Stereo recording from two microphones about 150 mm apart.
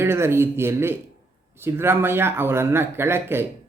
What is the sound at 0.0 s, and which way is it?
Speech, 15° right (ahead or behind).